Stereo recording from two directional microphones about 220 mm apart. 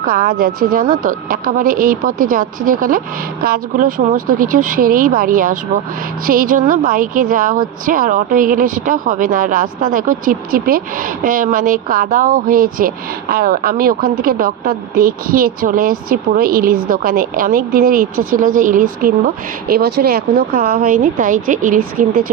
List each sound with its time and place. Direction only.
0.0 s a woman's voice: 40° right (ahead or behind)